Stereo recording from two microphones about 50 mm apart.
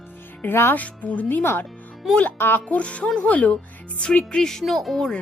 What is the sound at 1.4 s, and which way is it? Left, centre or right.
Speech, left.